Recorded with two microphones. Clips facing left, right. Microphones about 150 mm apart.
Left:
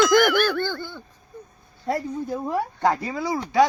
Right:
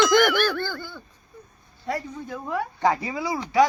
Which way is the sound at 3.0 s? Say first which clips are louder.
Left 2 dB; 10° right (ahead or behind).